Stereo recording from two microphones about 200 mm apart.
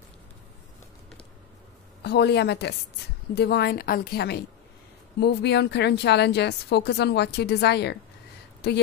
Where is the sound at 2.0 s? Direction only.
55° left (ahead or behind).